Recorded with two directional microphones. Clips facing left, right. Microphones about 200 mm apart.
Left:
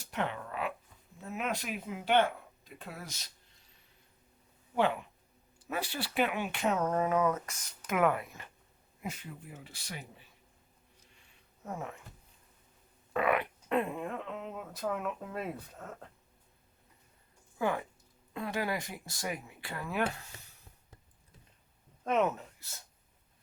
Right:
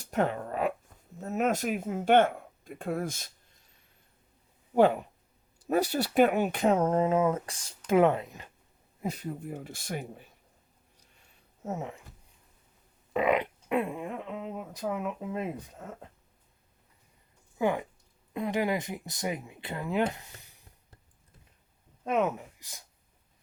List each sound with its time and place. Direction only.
0.0 s a sound: 40° right (ahead or behind)
1.2 s speech: 45° right (ahead or behind)
4.7 s speech: 40° right (ahead or behind); by 8.4 s 20° right (ahead or behind)
9.0 s speech: 40° right (ahead or behind)
11.6 s speech: 20° right (ahead or behind)
13.1 s speech: 20° right (ahead or behind)
17.6 s speech: 20° right (ahead or behind)
22.0 s speech: 10° right (ahead or behind)